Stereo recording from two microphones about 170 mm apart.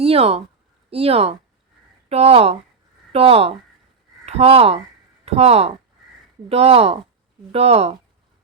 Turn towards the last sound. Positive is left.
turn(degrees=-40)  # may be behind; listen again after turning